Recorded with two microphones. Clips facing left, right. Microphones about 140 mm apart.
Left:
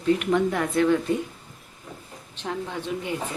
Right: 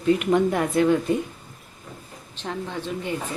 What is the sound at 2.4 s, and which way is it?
Speech, 5° left (ahead or behind).